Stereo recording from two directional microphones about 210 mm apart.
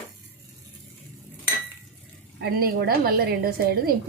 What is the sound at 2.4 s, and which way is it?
A woman's voice, 45° right (ahead or behind).